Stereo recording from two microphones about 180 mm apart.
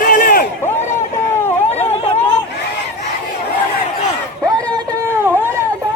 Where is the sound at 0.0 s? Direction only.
50° left (ahead or behind).